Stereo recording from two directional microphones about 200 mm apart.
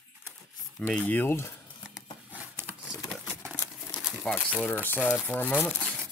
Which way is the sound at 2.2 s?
10° right (ahead or behind).